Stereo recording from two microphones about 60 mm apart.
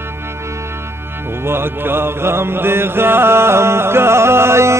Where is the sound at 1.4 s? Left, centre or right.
Right.